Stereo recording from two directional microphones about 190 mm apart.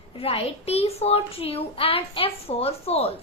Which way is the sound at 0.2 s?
30° left (ahead or behind).